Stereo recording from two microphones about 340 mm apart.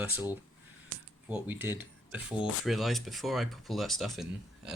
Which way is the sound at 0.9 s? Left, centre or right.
Right.